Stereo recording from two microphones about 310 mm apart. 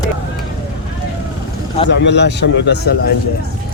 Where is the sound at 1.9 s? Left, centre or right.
Left.